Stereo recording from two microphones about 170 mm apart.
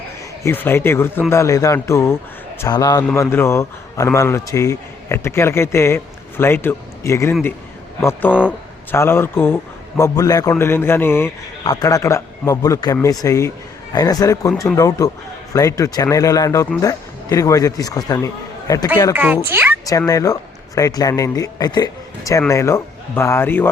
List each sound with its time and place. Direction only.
0.4 s a man's voice: 10° left (ahead or behind)
19.1 s speech: 10° right (ahead or behind)
19.8 s speech: 20° left (ahead or behind)